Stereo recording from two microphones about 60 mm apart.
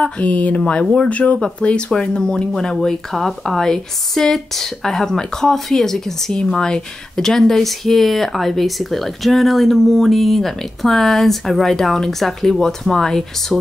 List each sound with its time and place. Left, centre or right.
0.0 s speech: left; by 13.6 s centre